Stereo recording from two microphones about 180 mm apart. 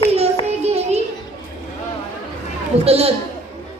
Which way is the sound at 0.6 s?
35° right (ahead or behind).